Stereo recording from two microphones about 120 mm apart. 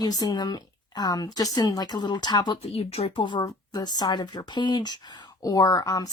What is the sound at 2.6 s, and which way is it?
A woman's voice, 55° left (ahead or behind).